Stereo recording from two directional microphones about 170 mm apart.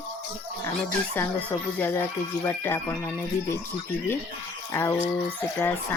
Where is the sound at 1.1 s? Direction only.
10° left (ahead or behind).